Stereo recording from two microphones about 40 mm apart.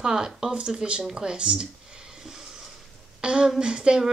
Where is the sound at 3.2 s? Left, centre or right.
Right.